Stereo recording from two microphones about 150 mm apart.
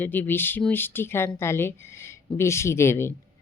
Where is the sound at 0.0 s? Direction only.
10° left (ahead or behind).